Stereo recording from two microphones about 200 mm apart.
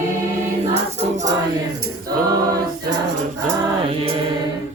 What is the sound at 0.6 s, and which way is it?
Choir, 35° right (ahead or behind).